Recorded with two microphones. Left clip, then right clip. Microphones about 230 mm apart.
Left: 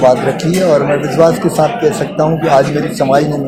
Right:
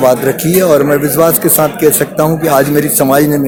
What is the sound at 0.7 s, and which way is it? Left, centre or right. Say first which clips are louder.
Speech: right 1 dB; right.